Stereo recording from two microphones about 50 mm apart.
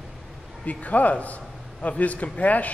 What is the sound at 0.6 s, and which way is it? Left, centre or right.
A man's voice, left.